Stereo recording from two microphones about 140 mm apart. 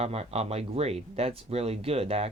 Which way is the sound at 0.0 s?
45° right (ahead or behind).